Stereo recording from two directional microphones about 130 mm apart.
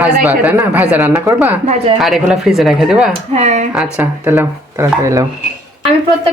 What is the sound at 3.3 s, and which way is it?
Speech, 60° right (ahead or behind).